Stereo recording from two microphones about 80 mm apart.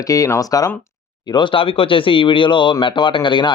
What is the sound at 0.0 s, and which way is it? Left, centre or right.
Speech, left.